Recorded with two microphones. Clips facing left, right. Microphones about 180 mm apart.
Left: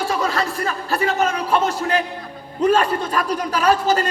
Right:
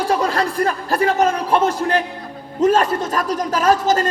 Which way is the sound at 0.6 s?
50° right (ahead or behind).